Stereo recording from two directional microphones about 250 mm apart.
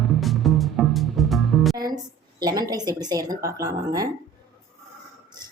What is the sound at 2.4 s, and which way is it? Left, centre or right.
Speech, centre.